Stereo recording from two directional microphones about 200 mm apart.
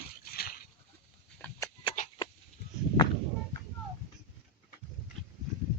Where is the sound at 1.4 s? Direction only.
15° left (ahead or behind).